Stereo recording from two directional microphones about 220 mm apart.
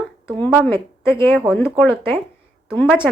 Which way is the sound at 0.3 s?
5° left (ahead or behind).